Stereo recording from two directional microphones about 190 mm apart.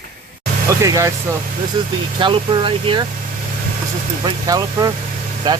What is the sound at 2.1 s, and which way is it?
Speech, 25° right (ahead or behind).